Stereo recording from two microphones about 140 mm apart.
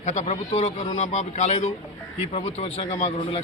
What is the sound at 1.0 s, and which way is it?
A man's voice, 60° left (ahead or behind).